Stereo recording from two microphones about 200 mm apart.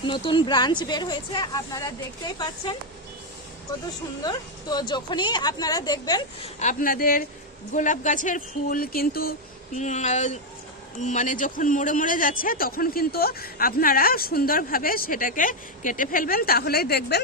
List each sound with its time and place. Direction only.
0.0 s a woman's voice: 25° left (ahead or behind)
4.2 s a woman's voice: 20° left (ahead or behind)
6.6 s a man's voice: 40° left (ahead or behind)
9.7 s a man's voice: 35° left (ahead or behind); by 17.2 s 50° left (ahead or behind)